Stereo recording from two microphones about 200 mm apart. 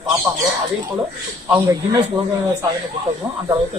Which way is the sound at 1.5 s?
15° right (ahead or behind).